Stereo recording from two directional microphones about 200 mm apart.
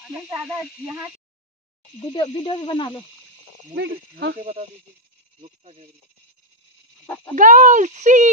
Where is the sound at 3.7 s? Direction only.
55° right (ahead or behind).